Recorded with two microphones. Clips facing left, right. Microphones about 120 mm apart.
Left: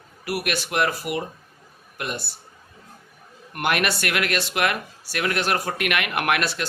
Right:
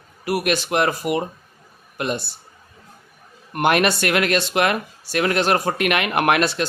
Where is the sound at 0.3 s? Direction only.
25° right (ahead or behind).